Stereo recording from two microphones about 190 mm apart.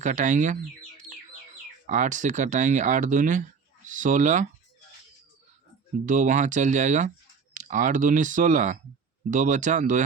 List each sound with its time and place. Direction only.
0.0 s speech: 40° right (ahead or behind)
1.9 s speech: 40° right (ahead or behind)
6.1 s speech: 40° right (ahead or behind)